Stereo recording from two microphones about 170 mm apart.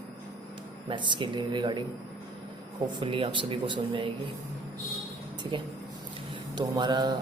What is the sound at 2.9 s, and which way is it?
A man's voice, 30° right (ahead or behind).